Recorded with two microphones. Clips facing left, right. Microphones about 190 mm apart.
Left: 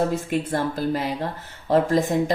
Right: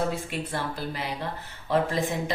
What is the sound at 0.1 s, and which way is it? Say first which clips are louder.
Speech: left 7 dB; 45° left (ahead or behind).